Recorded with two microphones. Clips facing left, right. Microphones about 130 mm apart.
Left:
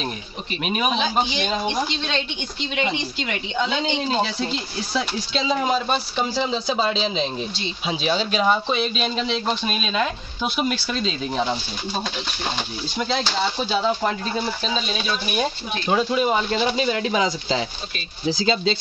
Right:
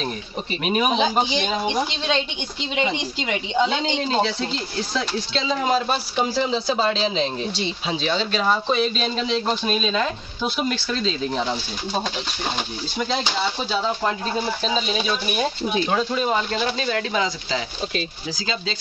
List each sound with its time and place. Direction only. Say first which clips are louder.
1.5 s speech: right 1 dB; 5° right (ahead or behind)
2.7 s a woman's voice: right 1 dB; 20° right (ahead or behind)
4.2 s speech: right 1 dB; 10° left (ahead or behind)
5.7 s speech: right 1 dB; 5° right (ahead or behind)
13.7 s speech: left 2 dB; 10° left (ahead or behind)
15.9 s speech: left 6 dB; 10° left (ahead or behind); by 18.8 s 25° left (ahead or behind)